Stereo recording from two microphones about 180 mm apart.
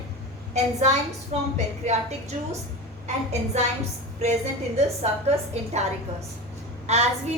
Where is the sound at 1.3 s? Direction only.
35° right (ahead or behind).